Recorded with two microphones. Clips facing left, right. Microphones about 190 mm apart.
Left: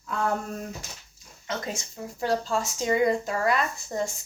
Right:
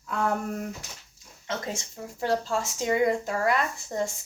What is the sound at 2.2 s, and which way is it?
Speech, 25° right (ahead or behind).